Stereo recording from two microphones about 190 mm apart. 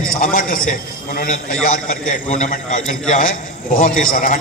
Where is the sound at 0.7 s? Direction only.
45° left (ahead or behind).